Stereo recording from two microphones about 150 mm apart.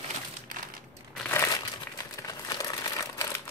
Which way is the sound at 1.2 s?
15° left (ahead or behind).